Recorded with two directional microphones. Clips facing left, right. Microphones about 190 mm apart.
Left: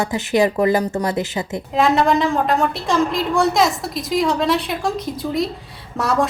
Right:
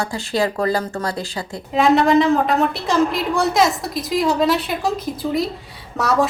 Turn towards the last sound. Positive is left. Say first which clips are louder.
# right 1 dB
turn(degrees=0)  # may be behind; listen again after turning